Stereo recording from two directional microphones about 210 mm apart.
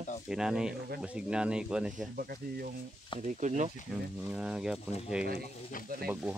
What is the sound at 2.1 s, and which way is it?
Speech, 45° right (ahead or behind).